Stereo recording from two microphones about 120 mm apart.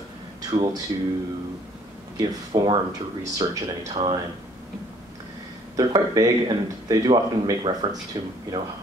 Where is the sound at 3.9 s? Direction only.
45° right (ahead or behind).